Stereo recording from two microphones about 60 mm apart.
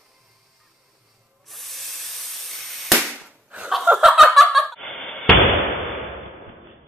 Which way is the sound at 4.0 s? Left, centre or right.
Centre.